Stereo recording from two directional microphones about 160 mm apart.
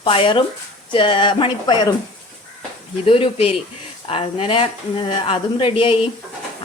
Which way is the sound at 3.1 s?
35° left (ahead or behind).